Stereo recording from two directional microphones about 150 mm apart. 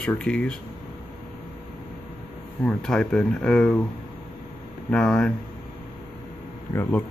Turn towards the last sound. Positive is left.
turn(degrees=15)  # may be behind; listen again after turning